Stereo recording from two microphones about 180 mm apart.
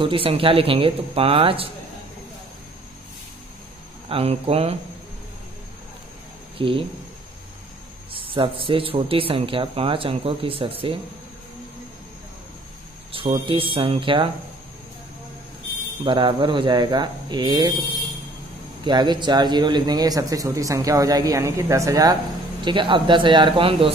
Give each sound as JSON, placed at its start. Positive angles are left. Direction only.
{"t": 0.0, "sound": "speech", "side_deg": -30}
{"t": 4.1, "sound": "speech", "side_deg": -35}
{"t": 6.6, "sound": "speech", "side_deg": -30}
{"t": 8.1, "sound": "speech", "side_deg": -30}
{"t": 13.1, "sound": "speech", "side_deg": -30}
{"t": 16.0, "sound": "speech", "side_deg": -25}
{"t": 18.9, "sound": "speech", "side_deg": -25}